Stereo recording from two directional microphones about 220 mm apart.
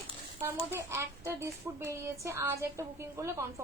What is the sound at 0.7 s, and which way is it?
A woman's voice, 10° right (ahead or behind).